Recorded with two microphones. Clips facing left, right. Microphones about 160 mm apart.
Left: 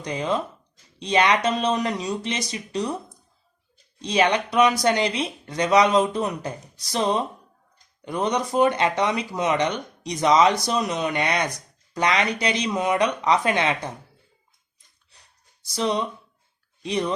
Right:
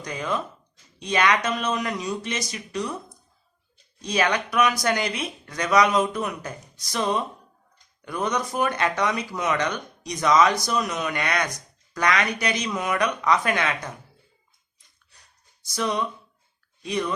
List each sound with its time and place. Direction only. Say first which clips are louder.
0.0 s speech: left 3 dB; 25° left (ahead or behind)
4.0 s speech: left 3 dB; 25° left (ahead or behind)
15.7 s speech: left 2 dB; 30° left (ahead or behind)